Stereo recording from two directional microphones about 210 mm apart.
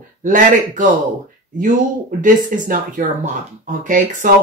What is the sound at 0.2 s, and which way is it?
Speech, 40° right (ahead or behind).